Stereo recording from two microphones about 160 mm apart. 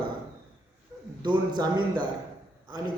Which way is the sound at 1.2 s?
25° right (ahead or behind).